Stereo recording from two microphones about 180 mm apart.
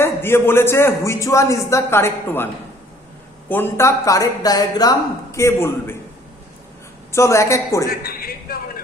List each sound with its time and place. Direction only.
0.0 s speech: 15° left (ahead or behind)
3.5 s speech: 15° left (ahead or behind)
7.1 s speech: 15° left (ahead or behind)
7.9 s a sound: 55° left (ahead or behind)